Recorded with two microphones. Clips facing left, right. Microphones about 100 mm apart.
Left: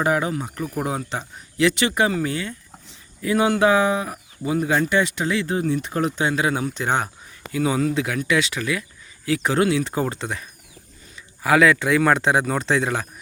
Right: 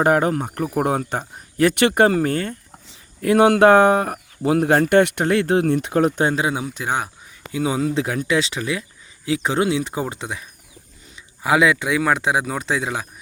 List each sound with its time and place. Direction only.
0.0 s speech: 50° right (ahead or behind)
3.2 s speech: 60° right (ahead or behind)
4.9 s speech: 60° right (ahead or behind)
6.7 s speech: 5° right (ahead or behind)
7.5 s speech: 20° right (ahead or behind)
11.4 s speech: 15° right (ahead or behind)